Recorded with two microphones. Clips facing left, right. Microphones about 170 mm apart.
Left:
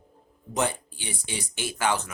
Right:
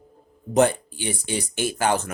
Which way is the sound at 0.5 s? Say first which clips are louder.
Right 9 dB; 55° right (ahead or behind).